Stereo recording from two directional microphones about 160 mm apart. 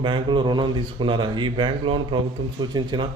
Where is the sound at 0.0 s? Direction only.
30° right (ahead or behind).